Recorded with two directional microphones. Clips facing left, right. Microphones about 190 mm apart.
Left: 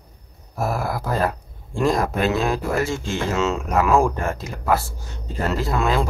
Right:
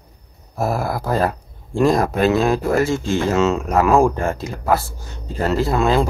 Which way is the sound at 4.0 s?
30° right (ahead or behind).